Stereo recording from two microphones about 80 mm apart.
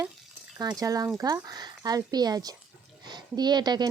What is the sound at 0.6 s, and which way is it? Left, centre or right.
Speech, right.